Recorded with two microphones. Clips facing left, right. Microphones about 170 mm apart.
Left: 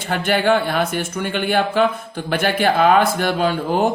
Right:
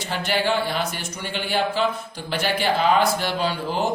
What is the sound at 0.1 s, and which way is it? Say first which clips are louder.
Speech: left 6 dB; 55° left (ahead or behind).